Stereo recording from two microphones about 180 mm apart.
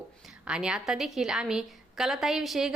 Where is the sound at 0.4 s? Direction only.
5° right (ahead or behind).